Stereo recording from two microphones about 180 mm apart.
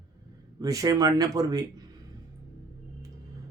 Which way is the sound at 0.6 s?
20° right (ahead or behind).